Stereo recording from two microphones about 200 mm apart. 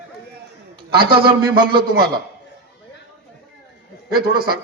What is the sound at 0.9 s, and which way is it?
Speech, 50° right (ahead or behind).